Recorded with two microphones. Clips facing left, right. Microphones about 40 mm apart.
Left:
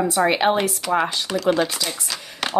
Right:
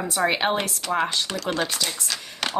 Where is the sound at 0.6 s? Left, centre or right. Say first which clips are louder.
Left 4 dB; centre.